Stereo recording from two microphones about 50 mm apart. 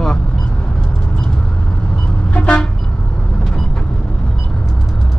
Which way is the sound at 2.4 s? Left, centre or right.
Centre.